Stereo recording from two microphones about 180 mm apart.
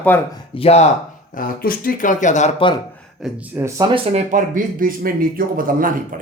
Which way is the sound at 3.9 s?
40° right (ahead or behind).